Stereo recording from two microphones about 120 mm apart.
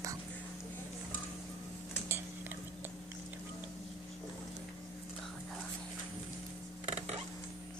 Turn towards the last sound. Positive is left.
turn(degrees=-65)  # may be behind; listen again after turning